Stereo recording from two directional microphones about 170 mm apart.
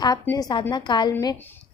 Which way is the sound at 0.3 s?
20° left (ahead or behind).